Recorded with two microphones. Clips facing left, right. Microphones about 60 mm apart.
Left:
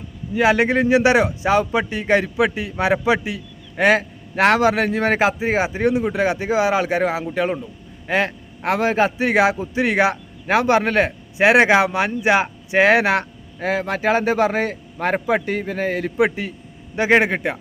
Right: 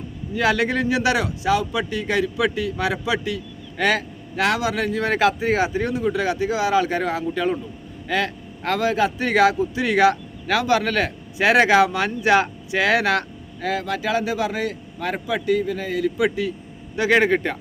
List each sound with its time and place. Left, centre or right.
0.3 s speech: left
4.4 s a man's voice: left
9.1 s a man's voice: left